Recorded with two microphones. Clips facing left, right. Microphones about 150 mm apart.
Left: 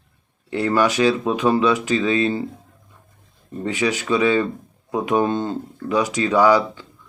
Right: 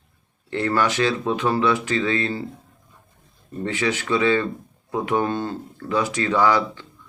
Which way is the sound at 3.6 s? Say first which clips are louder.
Left 2 dB; 15° left (ahead or behind).